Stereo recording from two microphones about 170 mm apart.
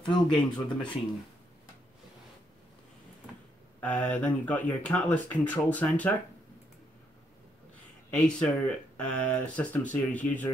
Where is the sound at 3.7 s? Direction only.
10° left (ahead or behind).